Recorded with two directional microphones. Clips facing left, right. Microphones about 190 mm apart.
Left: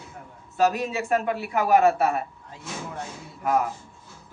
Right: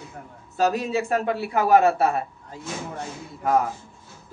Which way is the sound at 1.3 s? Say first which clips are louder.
Right 4 dB; 35° right (ahead or behind).